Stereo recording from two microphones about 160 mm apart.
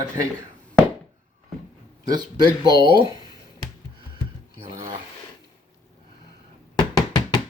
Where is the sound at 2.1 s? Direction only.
25° right (ahead or behind).